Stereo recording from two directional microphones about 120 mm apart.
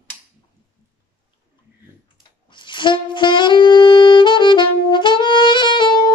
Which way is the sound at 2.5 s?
40° left (ahead or behind).